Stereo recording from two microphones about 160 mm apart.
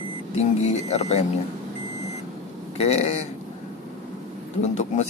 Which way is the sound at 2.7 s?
40° left (ahead or behind).